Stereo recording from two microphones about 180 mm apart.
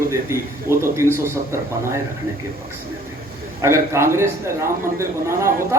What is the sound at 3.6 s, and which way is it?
A man's voice, 15° right (ahead or behind).